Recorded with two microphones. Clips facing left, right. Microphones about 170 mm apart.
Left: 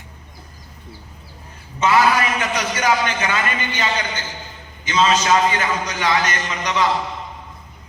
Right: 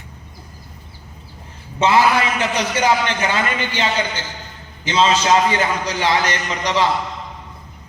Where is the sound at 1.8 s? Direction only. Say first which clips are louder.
Right 1 dB; 30° right (ahead or behind).